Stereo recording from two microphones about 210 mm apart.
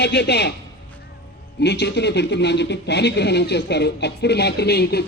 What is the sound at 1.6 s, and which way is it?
Speech, 55° left (ahead or behind).